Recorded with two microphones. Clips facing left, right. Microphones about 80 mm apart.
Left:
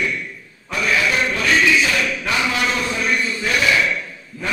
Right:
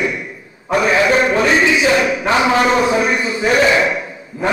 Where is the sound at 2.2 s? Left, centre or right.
Right.